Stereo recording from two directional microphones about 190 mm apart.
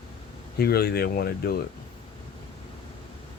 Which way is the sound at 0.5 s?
55° left (ahead or behind).